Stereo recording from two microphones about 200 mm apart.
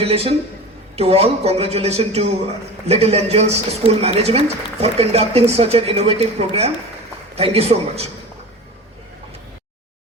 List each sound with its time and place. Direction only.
0.0 s speech: 30° right (ahead or behind)